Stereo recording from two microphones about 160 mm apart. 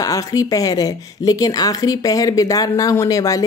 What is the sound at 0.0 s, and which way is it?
Speech, 20° left (ahead or behind).